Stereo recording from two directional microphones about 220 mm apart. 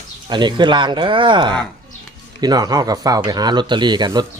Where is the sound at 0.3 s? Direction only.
20° right (ahead or behind).